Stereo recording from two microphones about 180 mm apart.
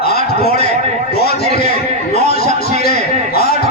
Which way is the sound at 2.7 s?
60° left (ahead or behind).